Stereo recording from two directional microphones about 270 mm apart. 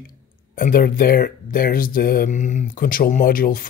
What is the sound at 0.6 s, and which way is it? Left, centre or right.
Speech, left.